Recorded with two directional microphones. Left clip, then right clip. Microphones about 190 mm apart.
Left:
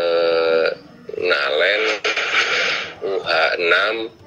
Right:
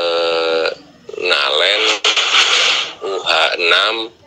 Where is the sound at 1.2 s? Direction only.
40° right (ahead or behind).